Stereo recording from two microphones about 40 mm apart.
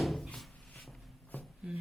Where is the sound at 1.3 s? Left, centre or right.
Left.